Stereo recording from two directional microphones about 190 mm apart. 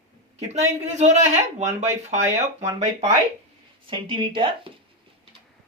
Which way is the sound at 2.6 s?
20° right (ahead or behind).